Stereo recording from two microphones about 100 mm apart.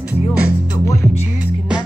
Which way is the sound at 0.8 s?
30° left (ahead or behind).